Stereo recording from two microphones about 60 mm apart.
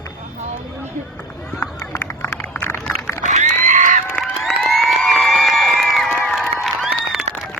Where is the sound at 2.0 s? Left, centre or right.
Left.